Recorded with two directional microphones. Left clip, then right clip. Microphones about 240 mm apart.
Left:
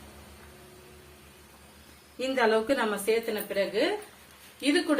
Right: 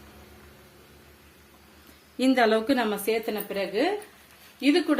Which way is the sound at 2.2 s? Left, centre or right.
Right.